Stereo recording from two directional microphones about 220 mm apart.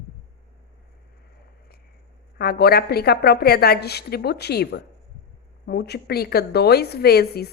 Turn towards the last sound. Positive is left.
turn(degrees=45)  # may be behind; listen again after turning